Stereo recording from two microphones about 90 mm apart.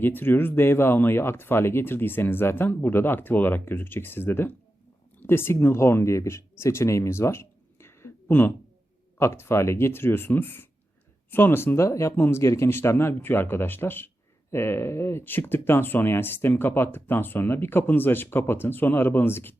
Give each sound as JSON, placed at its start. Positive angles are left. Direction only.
{"t": 0.0, "sound": "speech", "side_deg": 25}